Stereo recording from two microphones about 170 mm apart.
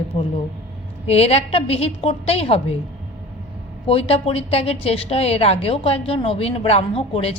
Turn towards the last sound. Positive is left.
turn(degrees=35)  # may be behind; listen again after turning